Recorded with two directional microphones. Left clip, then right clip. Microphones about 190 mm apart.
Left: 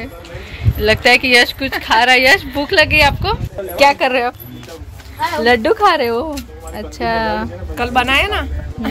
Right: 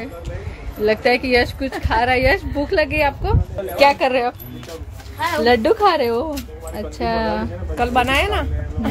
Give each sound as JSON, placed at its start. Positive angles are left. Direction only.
{"t": 0.8, "sound": "speech", "side_deg": 0}
{"t": 5.4, "sound": "speech", "side_deg": -5}
{"t": 7.7, "sound": "speech", "side_deg": -20}